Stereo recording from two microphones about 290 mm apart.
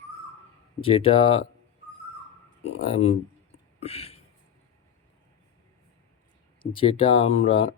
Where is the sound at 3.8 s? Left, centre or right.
Left.